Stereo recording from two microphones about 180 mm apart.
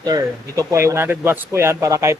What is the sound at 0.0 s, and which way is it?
Speech, 20° right (ahead or behind).